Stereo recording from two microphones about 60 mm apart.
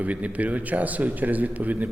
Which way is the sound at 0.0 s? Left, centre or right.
Right.